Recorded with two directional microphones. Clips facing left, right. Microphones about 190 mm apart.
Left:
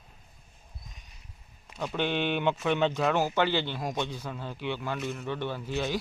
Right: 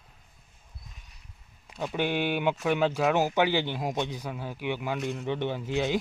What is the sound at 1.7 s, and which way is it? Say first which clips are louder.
Speech: right 1 dB; 5° right (ahead or behind).